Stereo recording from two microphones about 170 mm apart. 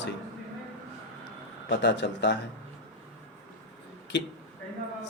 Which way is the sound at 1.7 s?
90° left.